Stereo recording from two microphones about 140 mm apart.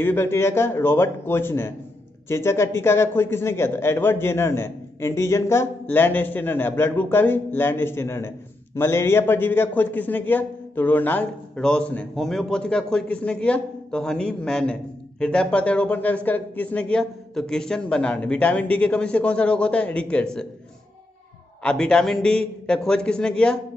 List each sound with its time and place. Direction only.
0.0 s a man's voice: 15° left (ahead or behind)
21.6 s a man's voice: 5° left (ahead or behind)